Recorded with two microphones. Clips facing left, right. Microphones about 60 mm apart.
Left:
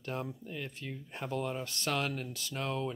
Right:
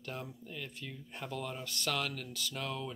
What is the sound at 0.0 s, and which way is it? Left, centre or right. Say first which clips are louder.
Speech: left 5 dB; left.